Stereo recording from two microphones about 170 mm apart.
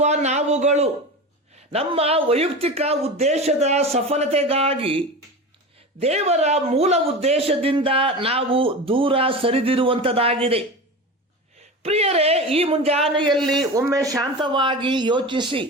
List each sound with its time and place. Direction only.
0.0 s a sound: 40° right (ahead or behind)
1.5 s speech: 35° right (ahead or behind)
11.8 s speech: 35° right (ahead or behind)
13.3 s a man's voice: centre (ahead or behind)
13.6 s speech: 20° right (ahead or behind)